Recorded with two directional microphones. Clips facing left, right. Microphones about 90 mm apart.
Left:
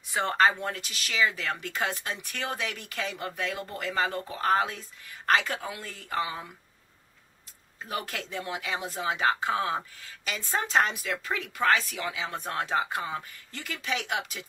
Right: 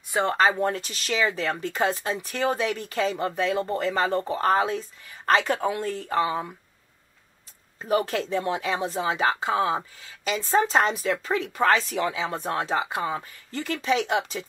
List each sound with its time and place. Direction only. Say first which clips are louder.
0.1 s speech: right 2 dB; 20° right (ahead or behind)
0.6 s speech: right 8 dB; 30° right (ahead or behind)
7.8 s speech: right 10 dB; 35° right (ahead or behind)
9.4 s speech: right 4 dB; 25° right (ahead or behind)
10.5 s speech: right 5 dB; 35° right (ahead or behind)